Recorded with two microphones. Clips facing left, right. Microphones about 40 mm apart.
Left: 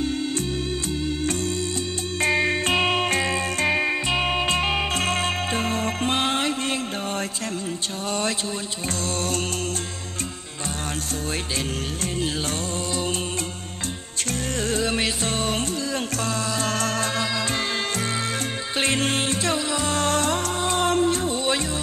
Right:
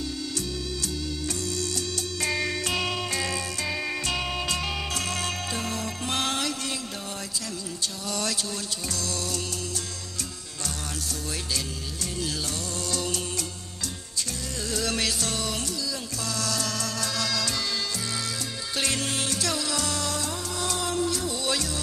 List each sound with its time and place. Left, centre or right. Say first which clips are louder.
2.2 s music: left 7 dB; left
14.7 s music: left 3 dB; left
18.8 s music: left 6 dB; left
20.0 s music: left 8 dB; left